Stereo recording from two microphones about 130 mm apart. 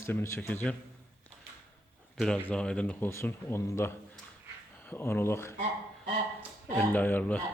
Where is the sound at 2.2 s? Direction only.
5° left (ahead or behind).